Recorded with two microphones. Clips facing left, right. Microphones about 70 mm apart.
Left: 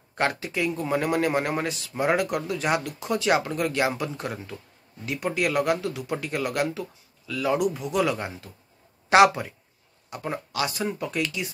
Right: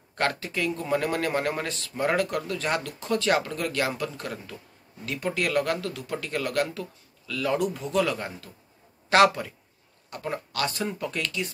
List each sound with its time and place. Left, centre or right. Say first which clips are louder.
0.1 s speech: left 1 dB; centre